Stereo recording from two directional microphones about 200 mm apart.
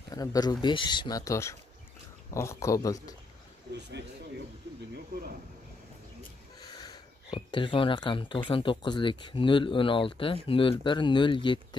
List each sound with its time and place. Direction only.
0.1 s a man's voice: 20° left (ahead or behind)
6.7 s speech: 20° left (ahead or behind)